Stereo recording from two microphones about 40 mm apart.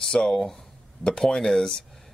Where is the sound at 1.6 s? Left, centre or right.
Centre.